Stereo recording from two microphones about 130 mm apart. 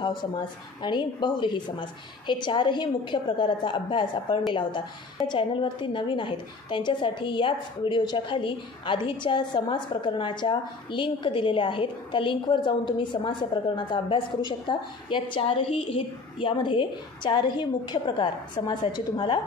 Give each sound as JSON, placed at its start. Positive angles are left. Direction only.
{"t": 0.0, "sound": "a woman's voice", "side_deg": 35}